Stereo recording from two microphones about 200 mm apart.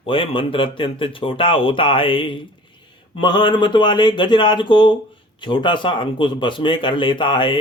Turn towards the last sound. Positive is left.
turn(degrees=25)  # may be behind; listen again after turning